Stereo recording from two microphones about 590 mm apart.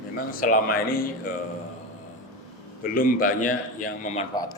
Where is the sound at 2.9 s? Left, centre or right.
Centre.